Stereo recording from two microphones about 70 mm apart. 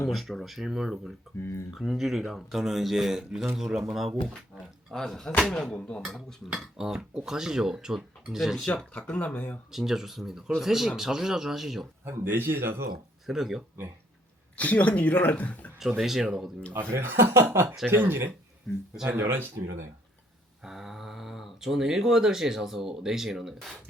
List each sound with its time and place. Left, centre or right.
0.1 s speech: centre
1.4 s speech: left
1.7 s speech: centre
6.5 s speech: centre
8.8 s speech: centre
9.7 s speech: centre
12.0 s speech: right
13.2 s speech: centre
14.5 s speech: left
15.8 s speech: centre
16.9 s speech: right
20.7 s speech: centre